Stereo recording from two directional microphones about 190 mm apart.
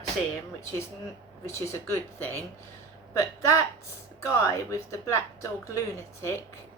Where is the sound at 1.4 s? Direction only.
15° left (ahead or behind).